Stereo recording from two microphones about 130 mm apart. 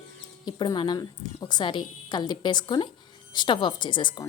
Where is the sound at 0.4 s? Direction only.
35° left (ahead or behind).